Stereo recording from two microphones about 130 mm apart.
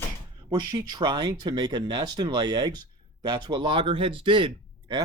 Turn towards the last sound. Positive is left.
turn(degrees=-40)  # may be behind; listen again after turning